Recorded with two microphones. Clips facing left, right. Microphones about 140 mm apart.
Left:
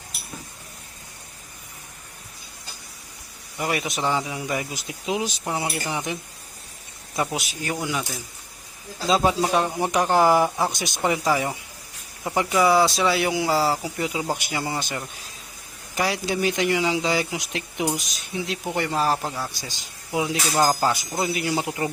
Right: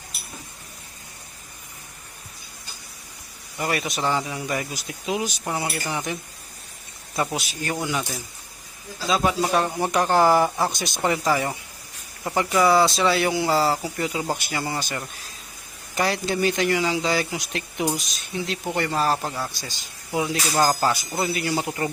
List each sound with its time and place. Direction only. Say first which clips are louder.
3.6 s speech: even; 15° left (ahead or behind)
4.7 s speech: even; 20° left (ahead or behind)
7.3 s speech: right 1 dB; 5° left (ahead or behind)
9.0 s speech: left 2 dB; 30° left (ahead or behind)
9.4 s speech: even; 15° left (ahead or behind)
16.0 s speech: right 1 dB; 5° left (ahead or behind)